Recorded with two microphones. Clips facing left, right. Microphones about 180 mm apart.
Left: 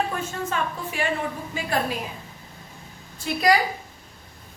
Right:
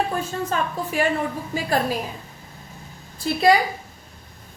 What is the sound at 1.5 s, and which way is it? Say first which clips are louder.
Speech: right 4 dB; 40° right (ahead or behind).